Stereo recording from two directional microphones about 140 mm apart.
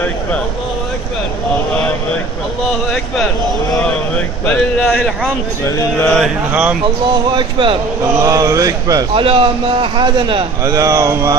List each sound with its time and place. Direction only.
4.5 s speech: 10° left (ahead or behind)
5.8 s speech: 15° left (ahead or behind)
6.5 s speech: 10° right (ahead or behind)
7.3 s a man's voice: 35° right (ahead or behind)
8.2 s speech: 25° right (ahead or behind)
9.1 s a man's voice: 40° right (ahead or behind)
10.6 s speech: 25° right (ahead or behind)